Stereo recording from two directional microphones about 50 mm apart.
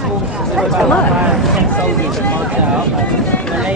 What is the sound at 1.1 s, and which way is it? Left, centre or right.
Speech, centre.